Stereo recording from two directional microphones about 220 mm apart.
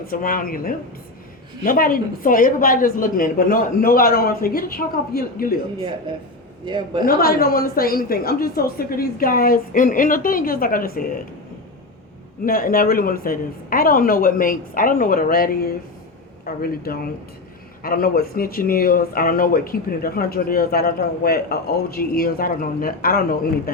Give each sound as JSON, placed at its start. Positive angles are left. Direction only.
{"t": 0.1, "sound": "speech", "side_deg": 40}
{"t": 6.1, "sound": "a man's voice", "side_deg": -20}
{"t": 7.0, "sound": "speech", "side_deg": 45}
{"t": 12.5, "sound": "speech", "side_deg": 40}